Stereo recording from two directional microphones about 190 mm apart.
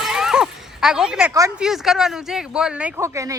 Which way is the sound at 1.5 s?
Centre (ahead or behind).